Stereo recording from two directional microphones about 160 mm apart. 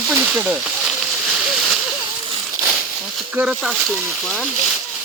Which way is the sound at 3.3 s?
5° right (ahead or behind).